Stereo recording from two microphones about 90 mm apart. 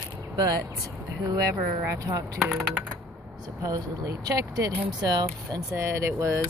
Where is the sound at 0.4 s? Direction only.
45° right (ahead or behind).